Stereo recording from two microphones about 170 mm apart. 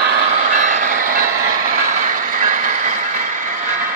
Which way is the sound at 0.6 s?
45° right (ahead or behind).